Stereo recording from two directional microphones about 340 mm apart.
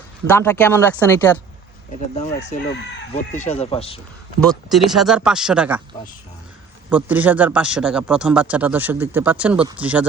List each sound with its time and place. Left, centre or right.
0.3 s speech: centre
2.5 s speech: left
4.4 s speech: centre
6.9 s speech: centre